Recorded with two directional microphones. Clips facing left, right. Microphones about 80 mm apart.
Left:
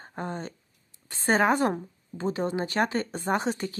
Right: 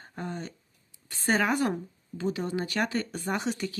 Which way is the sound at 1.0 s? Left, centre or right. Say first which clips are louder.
Left 3 dB; left.